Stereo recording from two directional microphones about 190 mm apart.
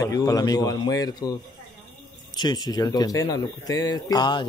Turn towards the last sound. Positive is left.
turn(degrees=25)  # may be behind; listen again after turning